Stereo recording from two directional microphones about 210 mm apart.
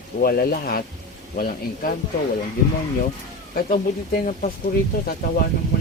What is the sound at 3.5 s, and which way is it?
Speech, 40° left (ahead or behind).